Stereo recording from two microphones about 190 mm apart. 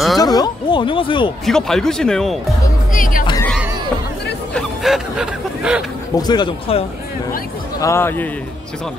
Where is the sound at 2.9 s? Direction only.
45° left (ahead or behind).